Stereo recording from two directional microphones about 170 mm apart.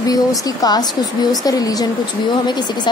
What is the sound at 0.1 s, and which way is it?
Speech, 20° left (ahead or behind).